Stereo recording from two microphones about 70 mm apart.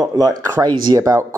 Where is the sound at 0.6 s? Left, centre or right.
Right.